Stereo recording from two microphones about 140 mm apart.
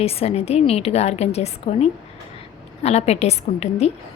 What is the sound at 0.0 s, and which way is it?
A woman's voice, 45° left (ahead or behind).